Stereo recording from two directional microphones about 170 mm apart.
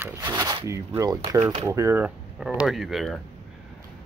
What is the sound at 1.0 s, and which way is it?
Speech, 20° right (ahead or behind).